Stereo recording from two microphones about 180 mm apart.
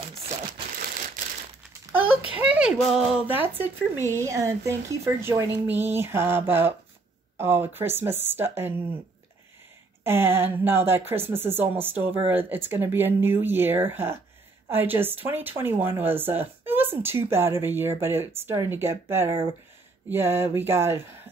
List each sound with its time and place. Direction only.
0.7 s crumpling: 55° right (ahead or behind)
2.3 s speech: 5° right (ahead or behind)
10.0 s speech: 10° right (ahead or behind)